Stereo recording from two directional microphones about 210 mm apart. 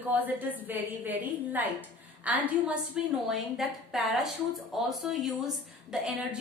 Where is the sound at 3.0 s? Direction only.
5° right (ahead or behind).